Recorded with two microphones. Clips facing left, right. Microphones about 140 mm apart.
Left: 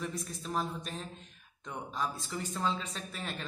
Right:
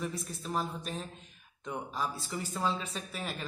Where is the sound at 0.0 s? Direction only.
Centre (ahead or behind).